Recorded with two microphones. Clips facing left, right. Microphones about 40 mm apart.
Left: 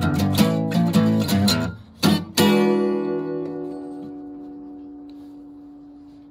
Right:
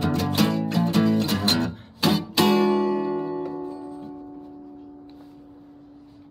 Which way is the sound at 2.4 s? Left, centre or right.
Left.